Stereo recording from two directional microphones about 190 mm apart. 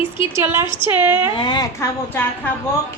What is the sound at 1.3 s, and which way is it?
Speech, 25° left (ahead or behind).